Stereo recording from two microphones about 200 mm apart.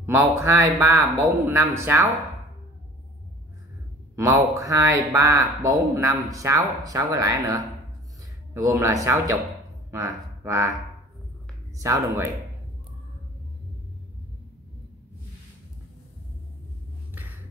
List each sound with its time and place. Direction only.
0.0 s speech: 15° right (ahead or behind)
4.1 s speech: 15° right (ahead or behind)
11.8 s speech: 15° right (ahead or behind)